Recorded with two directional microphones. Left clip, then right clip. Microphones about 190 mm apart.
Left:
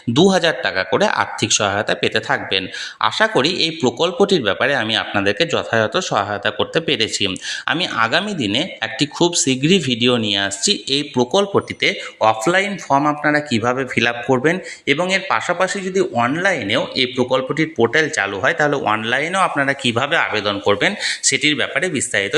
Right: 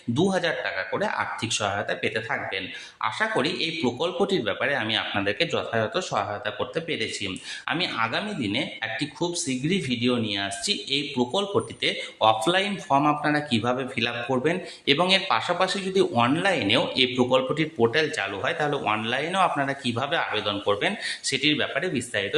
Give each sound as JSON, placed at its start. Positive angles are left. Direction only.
{"t": 0.1, "sound": "speech", "side_deg": 40}
{"t": 14.8, "sound": "a man's voice", "side_deg": 15}